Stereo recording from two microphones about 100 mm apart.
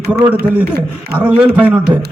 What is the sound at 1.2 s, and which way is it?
Speech, 10° right (ahead or behind).